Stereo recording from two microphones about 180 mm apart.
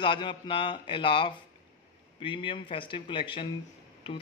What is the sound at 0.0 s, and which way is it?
A man's voice, 25° left (ahead or behind).